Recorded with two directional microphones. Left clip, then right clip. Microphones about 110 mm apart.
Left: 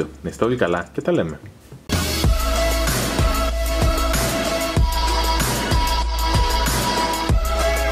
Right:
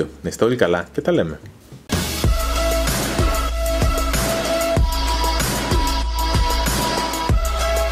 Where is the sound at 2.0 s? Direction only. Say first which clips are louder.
Left 2 dB; centre (ahead or behind).